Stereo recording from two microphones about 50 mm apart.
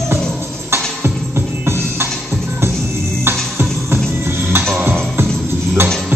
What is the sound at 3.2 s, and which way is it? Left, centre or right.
Music, right.